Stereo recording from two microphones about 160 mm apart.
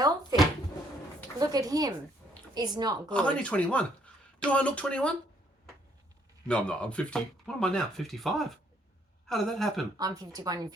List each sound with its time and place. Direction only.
1.4 s speech: 25° right (ahead or behind)
3.1 s speech: 5° left (ahead or behind)
6.5 s speech: 5° left (ahead or behind)
10.0 s speech: 25° right (ahead or behind)